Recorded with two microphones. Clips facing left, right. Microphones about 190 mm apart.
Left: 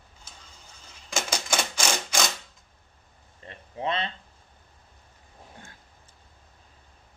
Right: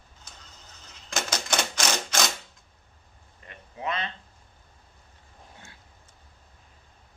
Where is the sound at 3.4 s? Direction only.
30° left (ahead or behind).